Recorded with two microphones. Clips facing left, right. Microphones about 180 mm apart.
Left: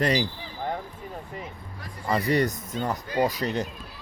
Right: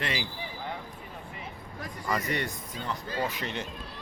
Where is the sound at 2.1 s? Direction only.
35° left (ahead or behind).